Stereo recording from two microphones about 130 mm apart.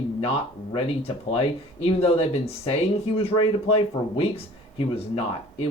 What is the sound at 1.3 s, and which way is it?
Speech, 50° left (ahead or behind).